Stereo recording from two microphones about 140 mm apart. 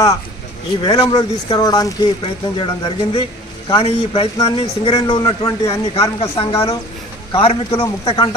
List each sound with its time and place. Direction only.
0.8 s speech: 30° left (ahead or behind)
2.2 s a man's voice: 40° left (ahead or behind)